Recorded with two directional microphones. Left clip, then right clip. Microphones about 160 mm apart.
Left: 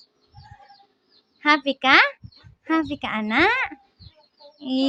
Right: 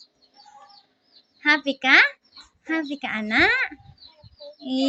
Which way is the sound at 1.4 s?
35° left (ahead or behind).